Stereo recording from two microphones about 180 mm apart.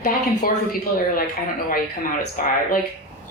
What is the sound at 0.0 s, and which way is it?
Speech, 50° left (ahead or behind).